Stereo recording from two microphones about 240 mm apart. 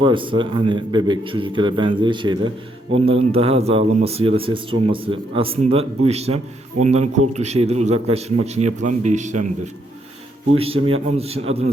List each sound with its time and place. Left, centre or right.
0.0 s a man's voice: right
10.5 s a man's voice: right